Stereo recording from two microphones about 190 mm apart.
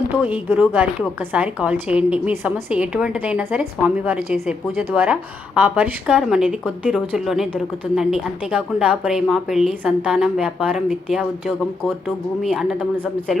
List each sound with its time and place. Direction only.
0.1 s a woman's voice: 10° right (ahead or behind)